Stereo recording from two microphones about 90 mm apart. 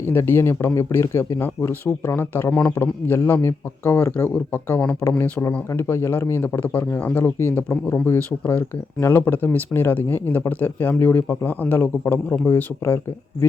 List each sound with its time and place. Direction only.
0.0 s speech: 25° left (ahead or behind)
5.0 s speech: 40° left (ahead or behind)
5.5 s speech: 25° left (ahead or behind)